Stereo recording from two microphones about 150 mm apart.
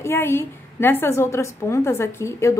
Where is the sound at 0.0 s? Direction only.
15° left (ahead or behind).